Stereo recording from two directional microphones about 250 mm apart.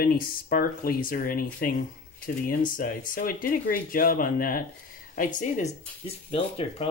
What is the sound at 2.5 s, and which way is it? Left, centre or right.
Speech, left.